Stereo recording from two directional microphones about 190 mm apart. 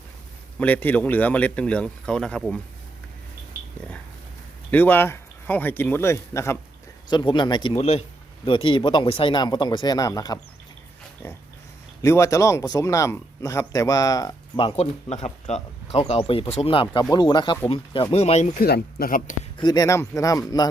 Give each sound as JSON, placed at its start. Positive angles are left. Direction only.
{"t": 0.6, "sound": "speech", "side_deg": 10}
{"t": 4.7, "sound": "speech", "side_deg": 10}
{"t": 12.0, "sound": "speech", "side_deg": 15}
{"t": 18.6, "sound": "speech", "side_deg": 55}
{"t": 19.5, "sound": "speech", "side_deg": 20}